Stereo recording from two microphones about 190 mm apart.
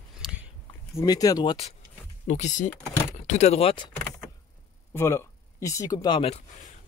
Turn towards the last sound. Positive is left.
turn(degrees=25)  # may be behind; listen again after turning